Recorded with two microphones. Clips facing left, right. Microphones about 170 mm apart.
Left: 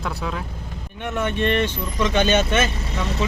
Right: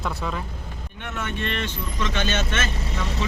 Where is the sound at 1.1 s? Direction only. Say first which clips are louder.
Left 8 dB; 15° left (ahead or behind).